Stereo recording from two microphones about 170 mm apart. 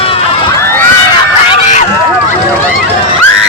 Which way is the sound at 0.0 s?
35° left (ahead or behind).